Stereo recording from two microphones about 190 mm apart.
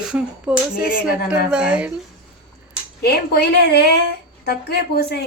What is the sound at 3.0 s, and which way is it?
Speech, 55° left (ahead or behind).